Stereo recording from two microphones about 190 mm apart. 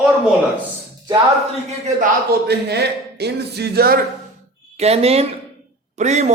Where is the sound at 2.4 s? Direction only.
60° right (ahead or behind).